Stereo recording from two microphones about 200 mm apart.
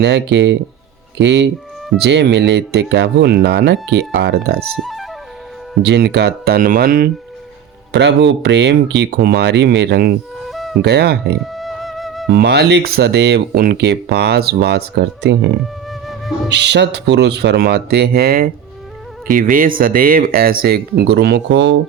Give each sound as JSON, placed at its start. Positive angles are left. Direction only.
{"t": 0.0, "sound": "speech", "side_deg": -60}
{"t": 4.8, "sound": "flute", "side_deg": 0}
{"t": 5.8, "sound": "speech", "side_deg": -55}
{"t": 7.9, "sound": "speech", "side_deg": -60}
{"t": 10.5, "sound": "insect", "side_deg": 0}
{"t": 10.8, "sound": "speech", "side_deg": -55}
{"t": 11.5, "sound": "music", "side_deg": 0}
{"t": 12.3, "sound": "speech", "side_deg": -55}
{"t": 15.6, "sound": "music", "side_deg": 0}
{"t": 16.5, "sound": "speech", "side_deg": -60}